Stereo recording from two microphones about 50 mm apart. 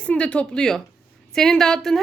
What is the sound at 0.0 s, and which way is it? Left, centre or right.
A woman's voice, left.